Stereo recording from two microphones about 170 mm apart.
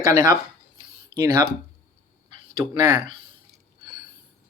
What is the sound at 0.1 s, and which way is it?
Speech, 25° right (ahead or behind).